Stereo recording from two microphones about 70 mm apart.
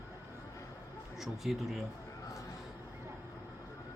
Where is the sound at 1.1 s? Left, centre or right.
Centre.